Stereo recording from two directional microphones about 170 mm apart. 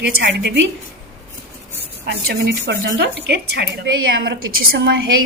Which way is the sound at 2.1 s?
75° right (ahead or behind).